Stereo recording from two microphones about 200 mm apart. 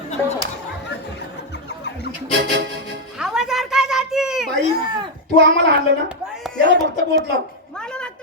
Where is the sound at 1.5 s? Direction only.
60° left (ahead or behind).